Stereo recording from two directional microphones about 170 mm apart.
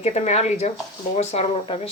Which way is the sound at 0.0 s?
40° left (ahead or behind).